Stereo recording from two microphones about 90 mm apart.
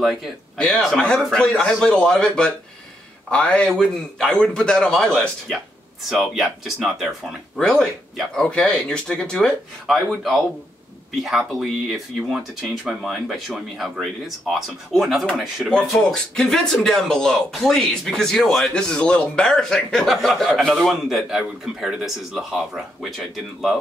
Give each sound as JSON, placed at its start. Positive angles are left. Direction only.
{"t": 0.0, "sound": "speech", "side_deg": 0}
{"t": 0.6, "sound": "speech", "side_deg": 10}
{"t": 7.5, "sound": "speech", "side_deg": 10}
{"t": 9.8, "sound": "speech", "side_deg": -5}